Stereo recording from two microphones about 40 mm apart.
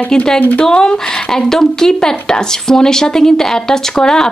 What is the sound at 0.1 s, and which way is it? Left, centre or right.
Speech, centre.